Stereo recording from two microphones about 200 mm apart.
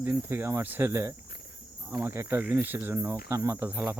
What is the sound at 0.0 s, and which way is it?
Speech, 10° right (ahead or behind).